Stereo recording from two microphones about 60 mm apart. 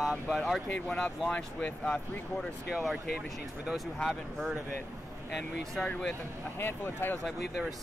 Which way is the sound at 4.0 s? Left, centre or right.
Centre.